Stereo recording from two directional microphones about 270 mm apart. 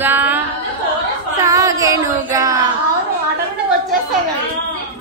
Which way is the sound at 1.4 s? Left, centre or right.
Centre.